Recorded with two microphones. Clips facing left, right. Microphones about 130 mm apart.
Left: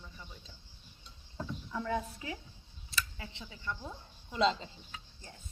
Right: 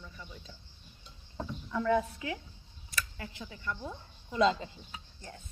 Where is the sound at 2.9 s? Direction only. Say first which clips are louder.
Even; 25° left (ahead or behind).